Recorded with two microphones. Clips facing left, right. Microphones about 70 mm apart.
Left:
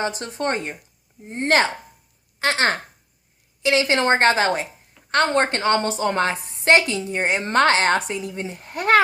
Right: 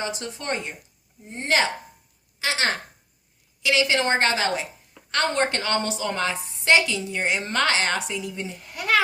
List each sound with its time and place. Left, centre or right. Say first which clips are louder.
0.0 s a woman's voice: left 6 dB; left
3.6 s a woman's voice: left 3 dB; left